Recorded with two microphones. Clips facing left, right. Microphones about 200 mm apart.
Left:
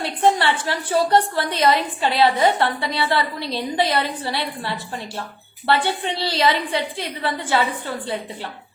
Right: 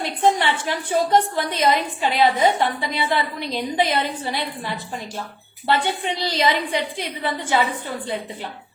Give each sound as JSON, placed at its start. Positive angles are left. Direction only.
{"t": 0.2, "sound": "a woman's voice", "side_deg": -15}